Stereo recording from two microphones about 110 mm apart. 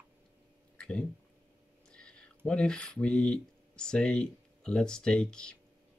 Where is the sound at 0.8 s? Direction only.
10° left (ahead or behind).